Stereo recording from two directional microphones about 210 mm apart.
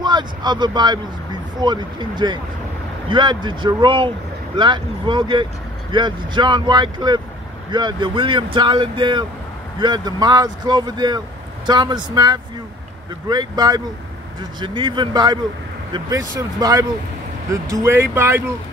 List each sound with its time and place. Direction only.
0.0 s speech: 20° right (ahead or behind)